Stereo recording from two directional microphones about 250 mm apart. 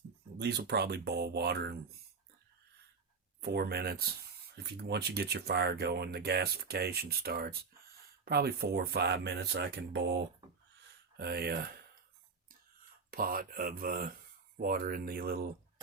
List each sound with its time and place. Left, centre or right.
0.3 s speech: right
3.4 s speech: right
13.1 s speech: right